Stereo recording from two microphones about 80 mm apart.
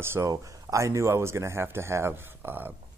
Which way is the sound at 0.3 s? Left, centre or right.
Right.